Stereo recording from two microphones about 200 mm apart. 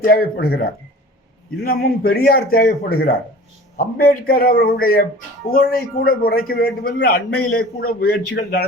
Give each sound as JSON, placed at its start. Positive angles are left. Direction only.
{"t": 0.0, "sound": "a man's voice", "side_deg": 45}